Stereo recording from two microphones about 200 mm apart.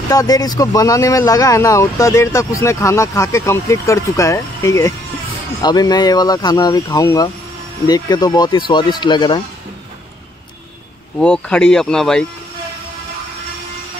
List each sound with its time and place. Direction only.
0.1 s speech: 20° left (ahead or behind)
11.1 s speech: 5° left (ahead or behind)